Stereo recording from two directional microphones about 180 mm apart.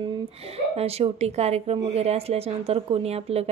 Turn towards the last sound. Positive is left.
turn(degrees=-35)  # may be behind; listen again after turning